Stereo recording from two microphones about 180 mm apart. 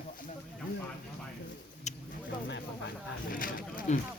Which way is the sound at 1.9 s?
40° left (ahead or behind).